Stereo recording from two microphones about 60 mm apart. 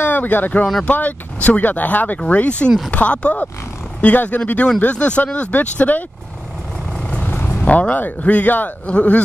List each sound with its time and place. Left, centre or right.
0.0 s speech: left
7.1 s speech: left